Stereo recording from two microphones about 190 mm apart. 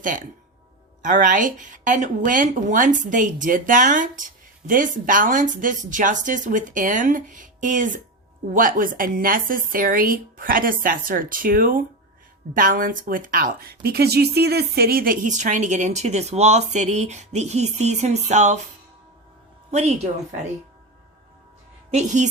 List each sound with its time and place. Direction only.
0.0 s a woman's voice: 45° right (ahead or behind)
21.8 s a woman's voice: 35° right (ahead or behind)